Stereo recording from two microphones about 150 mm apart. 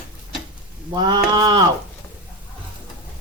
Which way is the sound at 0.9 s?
30° right (ahead or behind).